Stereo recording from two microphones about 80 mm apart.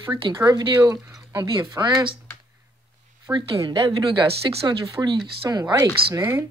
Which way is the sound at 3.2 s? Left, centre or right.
Right.